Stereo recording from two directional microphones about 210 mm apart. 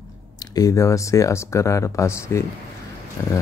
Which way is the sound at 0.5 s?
15° left (ahead or behind).